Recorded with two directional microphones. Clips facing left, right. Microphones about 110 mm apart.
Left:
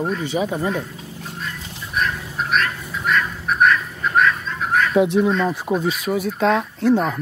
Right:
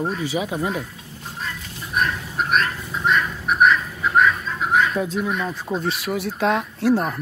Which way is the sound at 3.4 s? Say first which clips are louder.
Right 1 dB; 10° right (ahead or behind).